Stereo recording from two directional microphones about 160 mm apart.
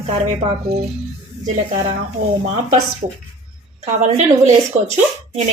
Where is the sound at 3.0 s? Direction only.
40° right (ahead or behind).